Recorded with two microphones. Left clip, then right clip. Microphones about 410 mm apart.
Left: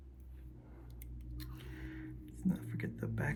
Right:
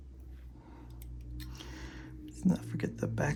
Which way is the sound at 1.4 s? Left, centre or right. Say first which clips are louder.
Right 4 dB; centre.